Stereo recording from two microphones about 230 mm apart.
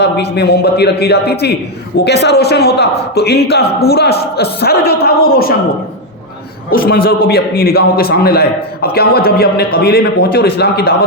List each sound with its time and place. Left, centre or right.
0.0 s a man's voice: left
6.7 s a man's voice: left